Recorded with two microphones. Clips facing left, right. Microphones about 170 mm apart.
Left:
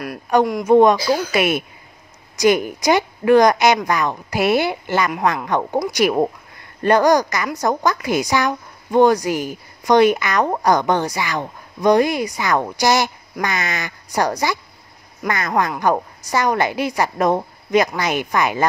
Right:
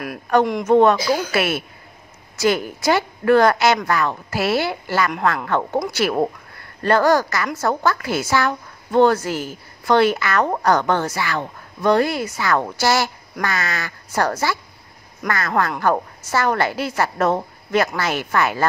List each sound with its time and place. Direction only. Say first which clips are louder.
0.3 s a woman's voice: left 2 dB; 15° left (ahead or behind)